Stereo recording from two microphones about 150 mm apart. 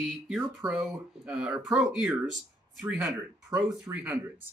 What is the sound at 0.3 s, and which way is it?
Speech, 5° right (ahead or behind).